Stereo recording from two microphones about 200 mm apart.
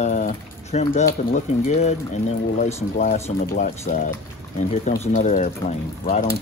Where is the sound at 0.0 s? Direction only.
35° left (ahead or behind).